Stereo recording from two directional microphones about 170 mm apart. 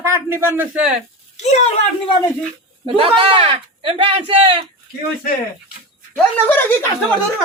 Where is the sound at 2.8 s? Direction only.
30° right (ahead or behind).